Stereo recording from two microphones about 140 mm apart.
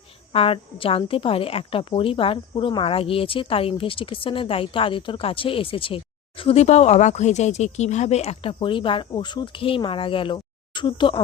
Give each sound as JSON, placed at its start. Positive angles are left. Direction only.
{"t": 0.3, "sound": "speech", "side_deg": 40}